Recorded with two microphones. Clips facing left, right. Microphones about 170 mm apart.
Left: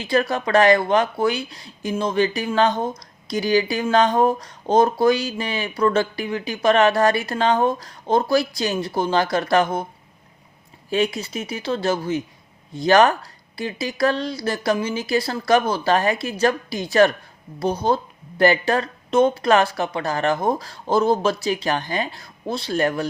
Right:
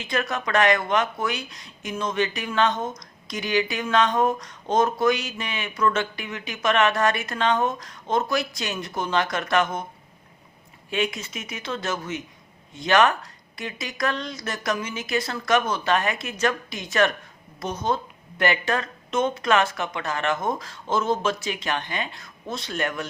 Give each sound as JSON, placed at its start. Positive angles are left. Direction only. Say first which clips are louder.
{"t": 0.0, "sound": "speech", "louder": "left 6 dB", "side_deg": 35}
{"t": 10.8, "sound": "speech", "louder": "left 5 dB", "side_deg": 35}